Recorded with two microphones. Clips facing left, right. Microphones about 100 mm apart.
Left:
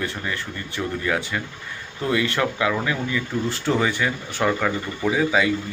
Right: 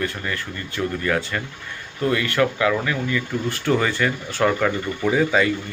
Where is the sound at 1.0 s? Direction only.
10° left (ahead or behind).